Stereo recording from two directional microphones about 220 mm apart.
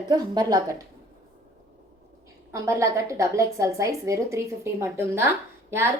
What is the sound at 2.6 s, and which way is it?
A woman's voice, 15° right (ahead or behind).